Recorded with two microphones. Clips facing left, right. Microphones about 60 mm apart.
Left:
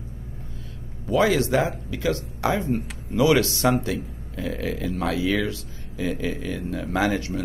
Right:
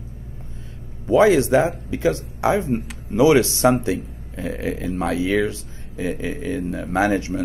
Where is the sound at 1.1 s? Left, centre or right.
Right.